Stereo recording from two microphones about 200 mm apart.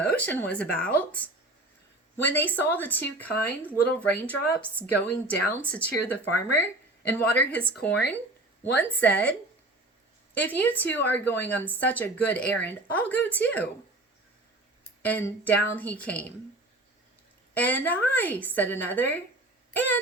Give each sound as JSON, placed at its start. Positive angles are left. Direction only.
{"t": 0.0, "sound": "a woman's voice", "side_deg": 5}
{"t": 2.1, "sound": "a woman's voice", "side_deg": 10}
{"t": 10.3, "sound": "a woman's voice", "side_deg": 10}
{"t": 15.0, "sound": "a woman's voice", "side_deg": 10}
{"t": 17.5, "sound": "a woman's voice", "side_deg": 10}